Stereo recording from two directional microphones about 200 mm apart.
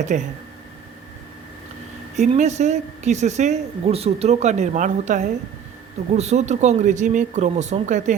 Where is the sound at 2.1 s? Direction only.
35° right (ahead or behind).